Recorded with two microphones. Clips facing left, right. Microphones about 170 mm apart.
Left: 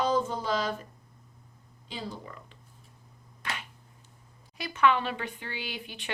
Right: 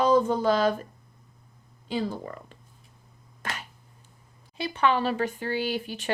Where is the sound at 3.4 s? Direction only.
45° right (ahead or behind).